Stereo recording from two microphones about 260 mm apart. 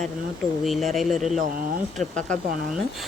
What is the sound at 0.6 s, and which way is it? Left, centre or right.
Speech, centre.